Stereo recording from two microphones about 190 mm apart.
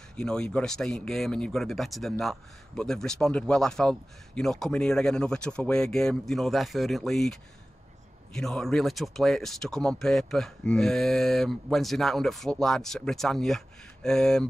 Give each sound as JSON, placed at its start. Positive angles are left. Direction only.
{"t": 0.1, "sound": "speech", "side_deg": 5}